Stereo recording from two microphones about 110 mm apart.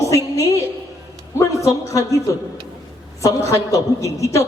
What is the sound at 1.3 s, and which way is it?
A man's voice, 30° left (ahead or behind).